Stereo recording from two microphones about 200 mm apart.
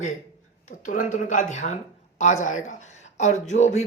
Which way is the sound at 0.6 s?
40° left (ahead or behind).